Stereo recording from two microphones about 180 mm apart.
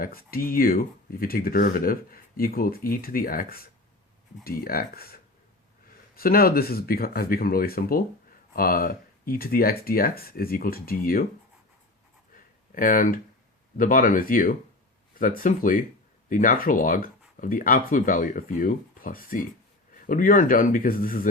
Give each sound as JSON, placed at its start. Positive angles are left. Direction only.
{"t": 0.0, "sound": "speech", "side_deg": 55}
{"t": 12.7, "sound": "speech", "side_deg": 50}